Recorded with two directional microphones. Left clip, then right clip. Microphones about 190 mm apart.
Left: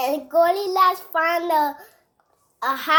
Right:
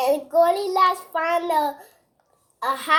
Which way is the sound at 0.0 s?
30° left (ahead or behind).